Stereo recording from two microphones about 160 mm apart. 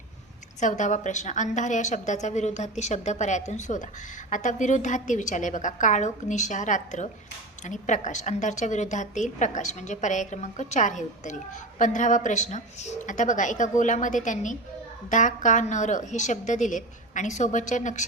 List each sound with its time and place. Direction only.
0.6 s a woman's voice: 50° left (ahead or behind)